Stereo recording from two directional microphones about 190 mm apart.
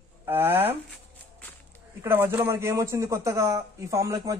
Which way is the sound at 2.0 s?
10° right (ahead or behind).